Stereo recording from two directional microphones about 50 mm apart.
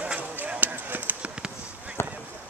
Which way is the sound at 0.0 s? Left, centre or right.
Right.